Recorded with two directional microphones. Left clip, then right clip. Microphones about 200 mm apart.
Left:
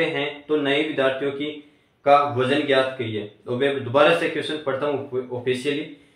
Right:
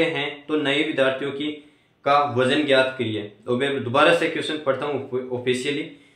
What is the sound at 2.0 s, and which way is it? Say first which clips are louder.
Speech: left 1 dB; 45° right (ahead or behind).